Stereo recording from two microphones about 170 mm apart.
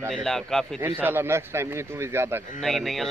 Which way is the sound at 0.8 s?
10° right (ahead or behind).